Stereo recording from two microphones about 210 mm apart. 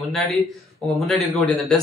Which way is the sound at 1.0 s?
Centre (ahead or behind).